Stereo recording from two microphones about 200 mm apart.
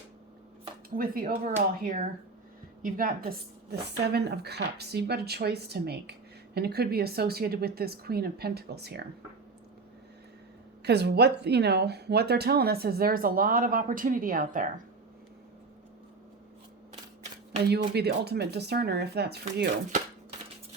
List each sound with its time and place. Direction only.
0.9 s speech: 45° right (ahead or behind)
10.8 s speech: 55° right (ahead or behind)
17.6 s speech: 55° right (ahead or behind)